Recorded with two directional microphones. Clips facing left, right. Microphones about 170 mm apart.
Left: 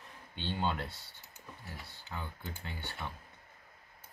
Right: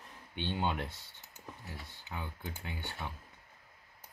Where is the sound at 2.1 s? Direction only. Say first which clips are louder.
Right 1 dB; 15° right (ahead or behind).